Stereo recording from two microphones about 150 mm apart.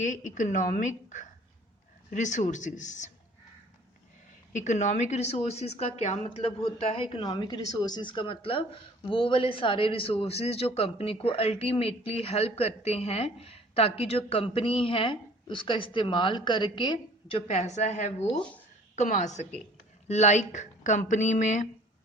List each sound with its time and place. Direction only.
0.0 s a woman's voice: 55° left (ahead or behind)
4.5 s a woman's voice: 55° left (ahead or behind)